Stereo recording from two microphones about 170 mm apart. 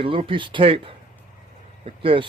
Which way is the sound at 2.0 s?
30° right (ahead or behind).